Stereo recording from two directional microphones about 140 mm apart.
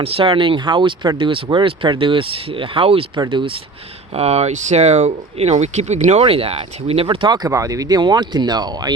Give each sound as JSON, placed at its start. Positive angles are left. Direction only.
{"t": 0.0, "sound": "speech", "side_deg": -40}
{"t": 4.1, "sound": "speech", "side_deg": -50}